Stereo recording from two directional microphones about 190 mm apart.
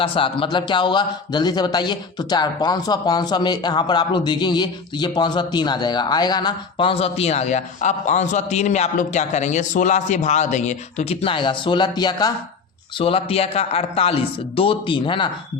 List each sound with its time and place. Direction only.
0.0 s a man's voice: 30° left (ahead or behind)